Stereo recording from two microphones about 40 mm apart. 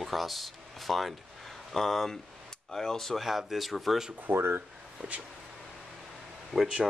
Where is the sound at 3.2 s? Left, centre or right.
Centre.